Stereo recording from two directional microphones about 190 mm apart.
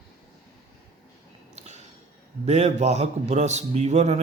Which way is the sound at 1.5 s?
35° right (ahead or behind).